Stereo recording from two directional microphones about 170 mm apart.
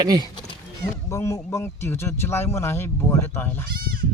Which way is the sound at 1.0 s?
15° left (ahead or behind).